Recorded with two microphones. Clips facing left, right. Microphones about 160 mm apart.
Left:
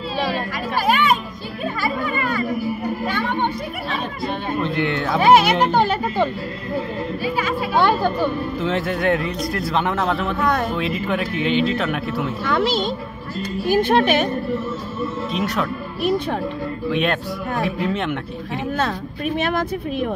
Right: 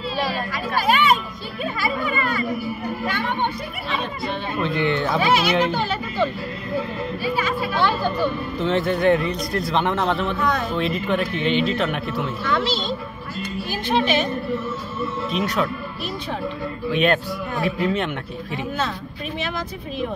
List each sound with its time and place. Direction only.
0.8 s children playing: 50° left (ahead or behind)
1.8 s a sound: 45° left (ahead or behind)
3.2 s music: 45° left (ahead or behind)
4.6 s speech: centre (ahead or behind)
5.2 s speech: 50° left (ahead or behind)
7.7 s speech: 50° left (ahead or behind)
8.5 s speech: 5° left (ahead or behind)
10.4 s speech: 55° left (ahead or behind)
10.8 s speech: 5° left (ahead or behind)
12.5 s speech: 55° left (ahead or behind)
15.3 s speech: centre (ahead or behind)
16.0 s speech: 50° left (ahead or behind)
16.9 s speech: centre (ahead or behind)
18.8 s speech: 55° left (ahead or behind)